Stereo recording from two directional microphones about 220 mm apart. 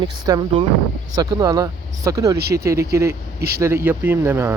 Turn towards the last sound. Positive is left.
turn(degrees=-10)  # may be behind; listen again after turning